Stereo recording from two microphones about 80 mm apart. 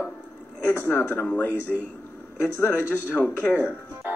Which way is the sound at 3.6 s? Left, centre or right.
Right.